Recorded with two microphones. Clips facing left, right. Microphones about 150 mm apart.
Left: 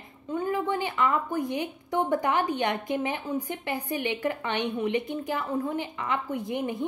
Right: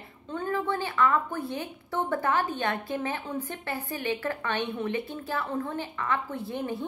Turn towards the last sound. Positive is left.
turn(degrees=15)  # may be behind; listen again after turning